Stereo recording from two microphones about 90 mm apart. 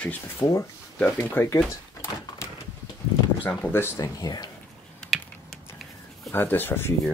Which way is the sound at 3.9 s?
45° left (ahead or behind).